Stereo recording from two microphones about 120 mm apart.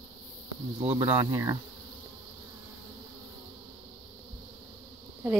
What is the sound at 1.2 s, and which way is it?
Insect, 30° right (ahead or behind).